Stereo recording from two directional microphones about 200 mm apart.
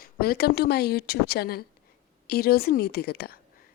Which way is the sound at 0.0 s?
50° left (ahead or behind).